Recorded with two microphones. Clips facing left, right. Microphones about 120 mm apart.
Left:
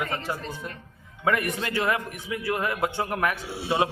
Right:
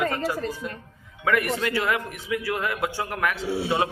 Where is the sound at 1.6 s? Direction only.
20° left (ahead or behind).